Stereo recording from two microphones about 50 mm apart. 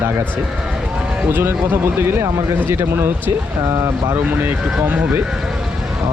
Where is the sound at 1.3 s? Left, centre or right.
Right.